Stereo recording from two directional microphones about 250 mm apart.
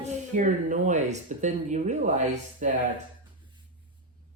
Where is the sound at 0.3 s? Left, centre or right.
Right.